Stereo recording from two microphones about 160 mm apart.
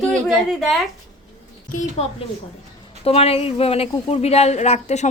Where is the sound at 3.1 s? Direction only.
40° left (ahead or behind).